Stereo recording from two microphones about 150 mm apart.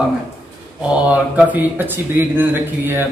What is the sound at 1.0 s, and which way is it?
Speech, 10° right (ahead or behind).